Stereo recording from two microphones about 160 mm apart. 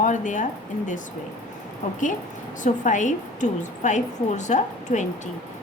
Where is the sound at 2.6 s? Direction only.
50° left (ahead or behind).